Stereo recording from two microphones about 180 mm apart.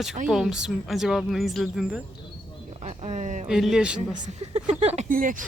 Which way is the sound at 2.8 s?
40° right (ahead or behind).